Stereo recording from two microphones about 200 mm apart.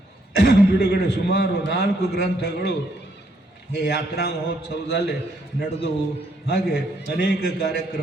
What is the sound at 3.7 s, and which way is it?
A man's voice, 55° left (ahead or behind).